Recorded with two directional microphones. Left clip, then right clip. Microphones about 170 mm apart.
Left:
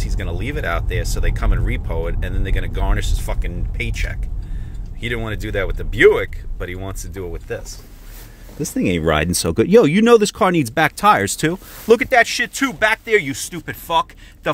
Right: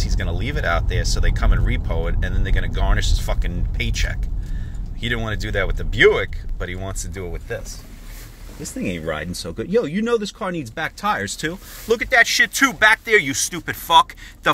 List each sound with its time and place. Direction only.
0.2 s speech: 20° left (ahead or behind); by 7.6 s 40° left (ahead or behind)
8.7 s speech: 85° left; by 11.5 s 70° left (ahead or behind)
11.5 s speech: 50° left (ahead or behind); by 14.5 s 15° left (ahead or behind)